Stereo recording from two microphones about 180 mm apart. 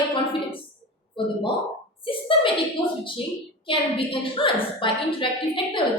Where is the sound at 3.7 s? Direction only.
30° left (ahead or behind).